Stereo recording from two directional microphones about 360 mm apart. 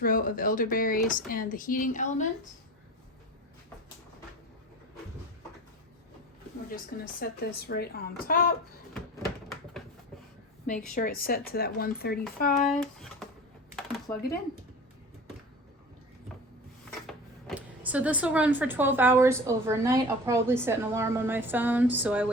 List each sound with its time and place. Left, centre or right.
0.0 s speech: left
6.7 s speech: left
10.7 s speech: left
12.5 s speech: centre
13.7 s a sound: centre
17.1 s speech: centre